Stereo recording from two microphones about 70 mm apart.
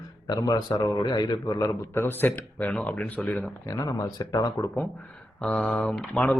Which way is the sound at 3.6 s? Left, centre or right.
Left.